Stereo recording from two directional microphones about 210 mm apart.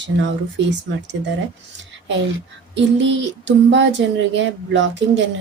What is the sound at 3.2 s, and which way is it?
Speech, 60° right (ahead or behind).